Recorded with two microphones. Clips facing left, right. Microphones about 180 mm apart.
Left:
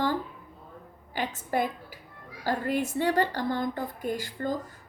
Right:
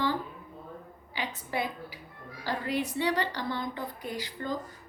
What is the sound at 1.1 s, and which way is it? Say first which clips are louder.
A woman's voice: left 5 dB; 45° left (ahead or behind).